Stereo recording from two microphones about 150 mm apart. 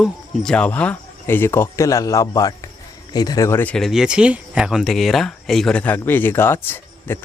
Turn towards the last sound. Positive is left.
turn(degrees=15)  # may be behind; listen again after turning